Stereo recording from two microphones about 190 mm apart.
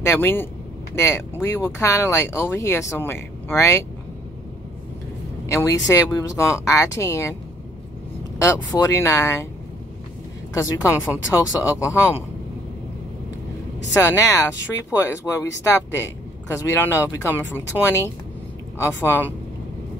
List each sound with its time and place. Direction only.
0.0 s speech: 15° left (ahead or behind)
5.5 s speech: 15° left (ahead or behind)
8.4 s speech: 15° left (ahead or behind)
10.5 s speech: 15° left (ahead or behind)
14.0 s speech: 15° left (ahead or behind)